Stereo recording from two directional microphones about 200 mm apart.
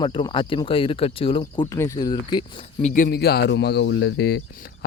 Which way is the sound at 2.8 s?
40° left (ahead or behind).